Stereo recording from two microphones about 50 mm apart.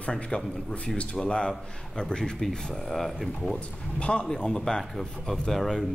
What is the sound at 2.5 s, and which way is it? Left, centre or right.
Speech, centre.